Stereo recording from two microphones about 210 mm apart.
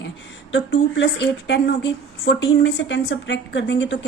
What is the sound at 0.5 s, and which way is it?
A woman's voice, 60° left (ahead or behind).